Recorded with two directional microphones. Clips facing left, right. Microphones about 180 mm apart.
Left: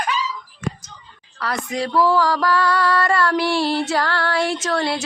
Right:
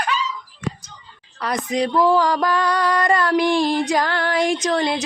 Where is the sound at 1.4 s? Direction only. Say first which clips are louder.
Right 3 dB; 20° right (ahead or behind).